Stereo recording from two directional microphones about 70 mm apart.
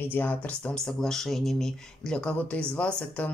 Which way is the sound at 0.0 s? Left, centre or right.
Left.